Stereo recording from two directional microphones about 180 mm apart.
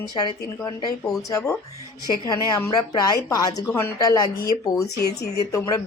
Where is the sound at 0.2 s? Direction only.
25° left (ahead or behind).